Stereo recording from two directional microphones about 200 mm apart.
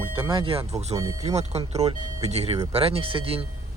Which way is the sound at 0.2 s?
25° right (ahead or behind).